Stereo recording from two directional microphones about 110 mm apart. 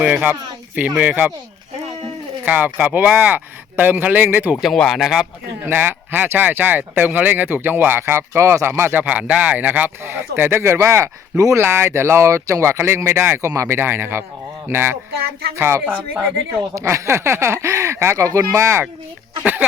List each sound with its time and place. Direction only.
0.0 s speech: 15° right (ahead or behind)
2.4 s speech: 15° right (ahead or behind)
4.6 s speech: centre (ahead or behind)
5.6 s speech: 20° right (ahead or behind)